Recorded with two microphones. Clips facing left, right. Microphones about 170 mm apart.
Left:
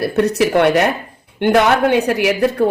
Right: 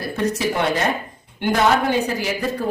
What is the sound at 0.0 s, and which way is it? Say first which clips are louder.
Speech: left 7 dB; 70° left (ahead or behind).